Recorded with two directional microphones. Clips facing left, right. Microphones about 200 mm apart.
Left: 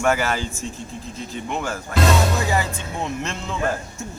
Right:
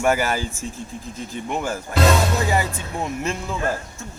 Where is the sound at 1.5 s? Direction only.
10° right (ahead or behind).